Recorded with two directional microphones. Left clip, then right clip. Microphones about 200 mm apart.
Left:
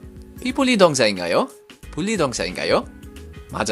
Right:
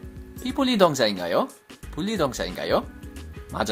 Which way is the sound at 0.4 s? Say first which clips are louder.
Left 4 dB; 30° left (ahead or behind).